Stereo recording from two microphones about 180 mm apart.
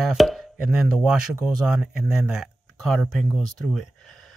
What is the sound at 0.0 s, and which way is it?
Speech, centre (ahead or behind).